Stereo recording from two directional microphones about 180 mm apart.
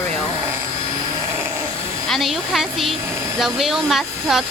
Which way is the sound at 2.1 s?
Centre (ahead or behind).